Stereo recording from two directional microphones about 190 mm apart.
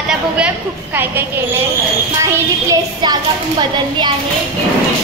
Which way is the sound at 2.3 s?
20° right (ahead or behind).